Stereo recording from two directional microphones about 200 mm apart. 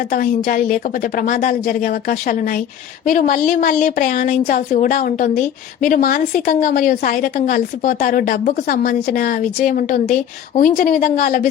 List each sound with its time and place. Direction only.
0.1 s speech: 45° left (ahead or behind)